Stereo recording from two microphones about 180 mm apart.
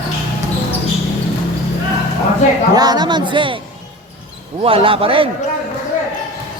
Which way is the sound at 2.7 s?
20° right (ahead or behind).